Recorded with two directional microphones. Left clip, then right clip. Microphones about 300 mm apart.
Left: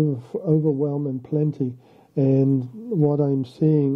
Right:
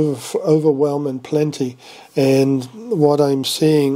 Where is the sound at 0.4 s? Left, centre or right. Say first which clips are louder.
Right 7 dB; centre.